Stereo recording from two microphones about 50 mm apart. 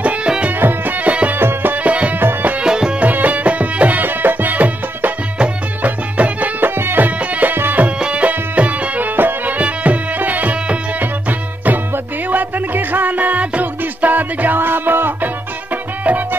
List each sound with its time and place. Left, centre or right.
0.0 s music: right
0.6 s music: right
0.9 s music: right
1.4 s music: right
1.7 s music: right
2.6 s music: centre
3.0 s music: right
6.8 s music: right
7.1 s music: right
7.5 s music: right
8.0 s music: right